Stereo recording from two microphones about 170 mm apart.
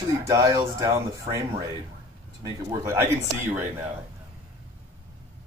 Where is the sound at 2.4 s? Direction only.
15° right (ahead or behind).